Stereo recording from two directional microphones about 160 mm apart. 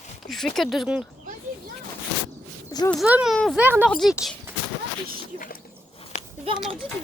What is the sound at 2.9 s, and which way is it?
Speech, 5° right (ahead or behind).